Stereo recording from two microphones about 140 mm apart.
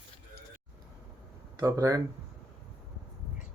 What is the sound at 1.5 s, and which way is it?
Speech, 25° right (ahead or behind).